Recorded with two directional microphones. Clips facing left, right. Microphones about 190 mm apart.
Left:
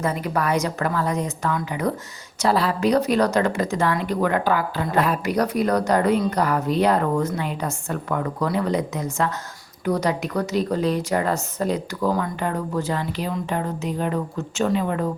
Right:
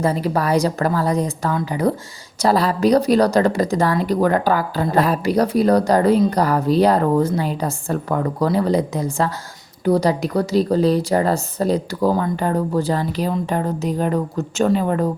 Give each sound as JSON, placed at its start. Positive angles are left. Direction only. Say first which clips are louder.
{"t": 0.0, "sound": "speech", "louder": "right 4 dB", "side_deg": -30}